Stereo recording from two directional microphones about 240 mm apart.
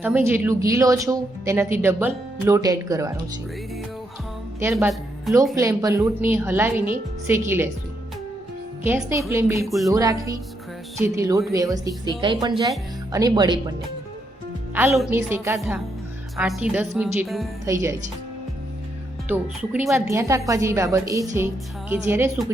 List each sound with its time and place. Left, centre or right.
0.0 s speech: centre
4.6 s speech: centre
5.5 s speech: centre
8.8 s speech: centre
9.6 s speech: centre
9.9 s speech: centre
14.8 s speech: centre
19.3 s speech: centre